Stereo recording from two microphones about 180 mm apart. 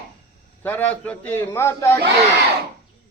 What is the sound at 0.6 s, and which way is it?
A man's voice, 10° left (ahead or behind).